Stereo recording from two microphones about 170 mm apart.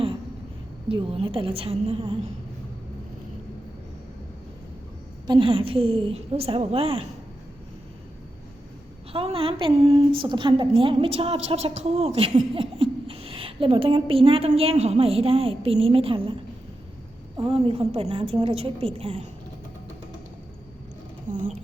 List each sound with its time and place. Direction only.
0.9 s a woman's voice: 30° right (ahead or behind)
5.2 s a woman's voice: 25° right (ahead or behind)
9.1 s a woman's voice: 35° right (ahead or behind)
17.3 s a woman's voice: 30° right (ahead or behind)
21.2 s speech: 45° right (ahead or behind)